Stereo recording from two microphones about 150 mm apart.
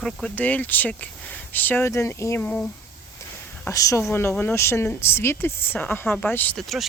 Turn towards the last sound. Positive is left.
turn(degrees=0)  # may be behind; listen again after turning